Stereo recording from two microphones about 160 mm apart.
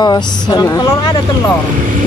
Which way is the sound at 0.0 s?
25° left (ahead or behind).